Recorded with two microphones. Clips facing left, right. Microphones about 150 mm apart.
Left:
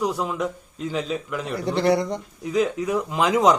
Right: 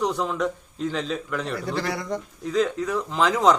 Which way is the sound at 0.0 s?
5° left (ahead or behind).